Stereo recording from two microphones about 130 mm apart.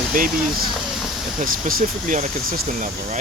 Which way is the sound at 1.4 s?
90° right.